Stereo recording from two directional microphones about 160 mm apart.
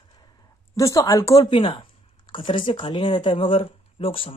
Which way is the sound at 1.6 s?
30° left (ahead or behind).